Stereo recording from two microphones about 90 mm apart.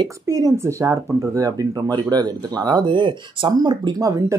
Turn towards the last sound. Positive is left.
turn(degrees=-50)  # may be behind; listen again after turning